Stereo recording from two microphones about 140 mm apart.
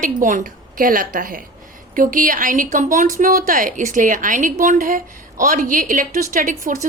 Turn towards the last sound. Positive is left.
turn(degrees=-70)  # may be behind; listen again after turning